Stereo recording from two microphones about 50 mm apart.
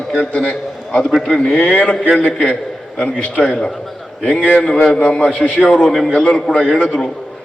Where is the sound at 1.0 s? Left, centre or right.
Centre.